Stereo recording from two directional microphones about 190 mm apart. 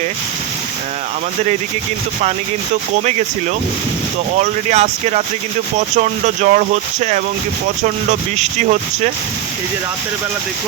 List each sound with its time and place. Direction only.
4.7 s speech: 35° right (ahead or behind)